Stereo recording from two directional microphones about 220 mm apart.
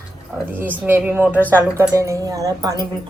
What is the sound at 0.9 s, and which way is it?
A woman's voice, 10° right (ahead or behind).